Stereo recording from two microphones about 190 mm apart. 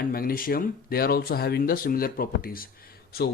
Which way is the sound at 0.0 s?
50° left (ahead or behind).